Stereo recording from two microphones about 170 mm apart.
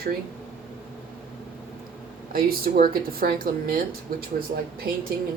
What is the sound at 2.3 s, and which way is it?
Speech, 60° right (ahead or behind).